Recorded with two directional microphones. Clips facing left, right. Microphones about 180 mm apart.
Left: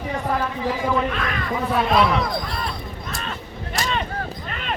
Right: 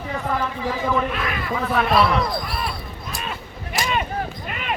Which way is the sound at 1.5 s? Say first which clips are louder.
Even; 15° left (ahead or behind).